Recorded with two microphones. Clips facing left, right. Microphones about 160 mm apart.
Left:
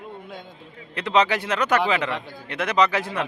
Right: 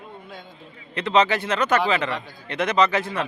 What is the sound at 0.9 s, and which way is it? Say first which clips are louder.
Speech: right 1 dB; 10° left (ahead or behind).